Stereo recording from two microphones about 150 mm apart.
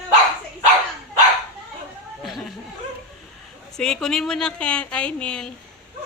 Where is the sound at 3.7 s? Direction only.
5° left (ahead or behind).